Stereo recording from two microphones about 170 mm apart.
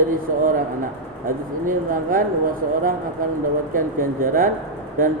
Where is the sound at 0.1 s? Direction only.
50° right (ahead or behind).